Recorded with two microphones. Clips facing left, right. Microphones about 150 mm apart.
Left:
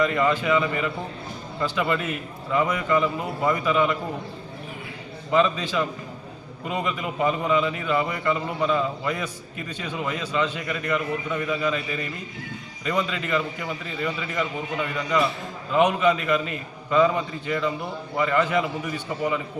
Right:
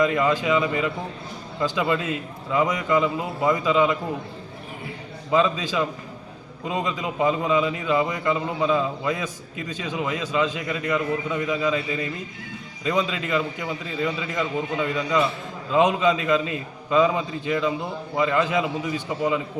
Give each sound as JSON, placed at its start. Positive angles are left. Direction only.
{"t": 0.0, "sound": "a man's voice", "side_deg": -15}
{"t": 2.0, "sound": "a man's voice", "side_deg": -90}
{"t": 2.5, "sound": "a man's voice", "side_deg": -20}
{"t": 5.3, "sound": "a man's voice", "side_deg": -15}
{"t": 6.7, "sound": "a man's voice", "side_deg": -20}